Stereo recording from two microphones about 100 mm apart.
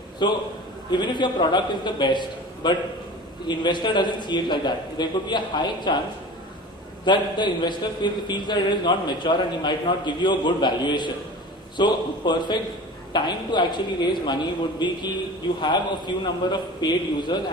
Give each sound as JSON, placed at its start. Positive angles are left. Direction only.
{"t": 0.2, "sound": "a man's voice", "side_deg": 50}
{"t": 7.1, "sound": "a man's voice", "side_deg": 50}
{"t": 16.4, "sound": "a man's voice", "side_deg": 50}